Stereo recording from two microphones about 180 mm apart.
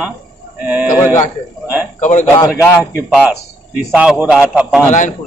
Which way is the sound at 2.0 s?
45° left (ahead or behind).